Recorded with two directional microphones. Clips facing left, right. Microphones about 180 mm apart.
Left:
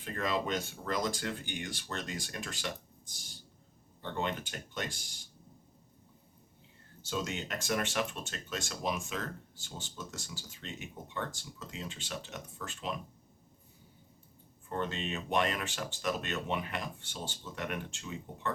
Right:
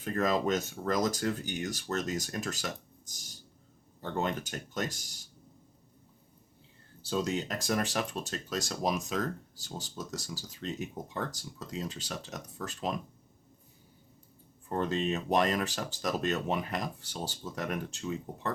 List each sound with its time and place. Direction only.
0.0 s speech: 45° right (ahead or behind)
7.0 s speech: 35° right (ahead or behind)
14.7 s speech: 40° right (ahead or behind)